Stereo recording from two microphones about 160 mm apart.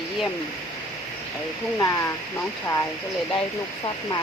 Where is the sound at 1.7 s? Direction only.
20° left (ahead or behind).